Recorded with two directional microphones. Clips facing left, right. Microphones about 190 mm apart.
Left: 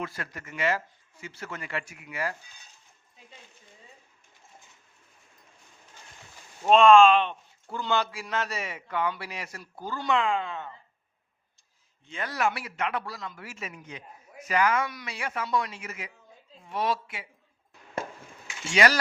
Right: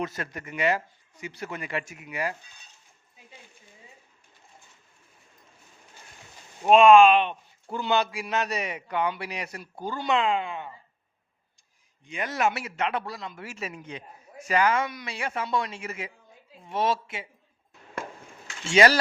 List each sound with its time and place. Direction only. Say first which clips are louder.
0.0 s a man's voice: right 4 dB; 20° right (ahead or behind)
6.6 s a man's voice: right 2 dB; 15° right (ahead or behind)
12.0 s a man's voice: right 2 dB; 20° right (ahead or behind)
18.7 s a man's voice: right 4 dB; 25° right (ahead or behind)